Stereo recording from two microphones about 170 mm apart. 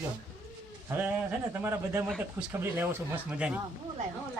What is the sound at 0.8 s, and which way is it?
Speech, 10° right (ahead or behind).